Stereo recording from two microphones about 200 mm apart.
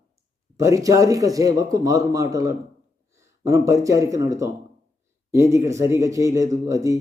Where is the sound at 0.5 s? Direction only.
15° right (ahead or behind).